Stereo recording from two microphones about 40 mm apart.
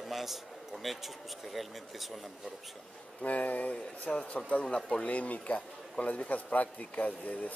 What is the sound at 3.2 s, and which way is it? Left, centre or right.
A man's voice, left.